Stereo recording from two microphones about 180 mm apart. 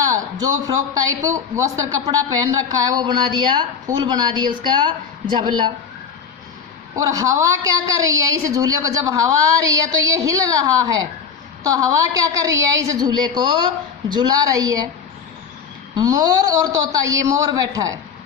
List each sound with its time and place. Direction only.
0.0 s speech: 20° right (ahead or behind)
6.9 s a woman's voice: 20° right (ahead or behind)
16.0 s speech: 20° right (ahead or behind)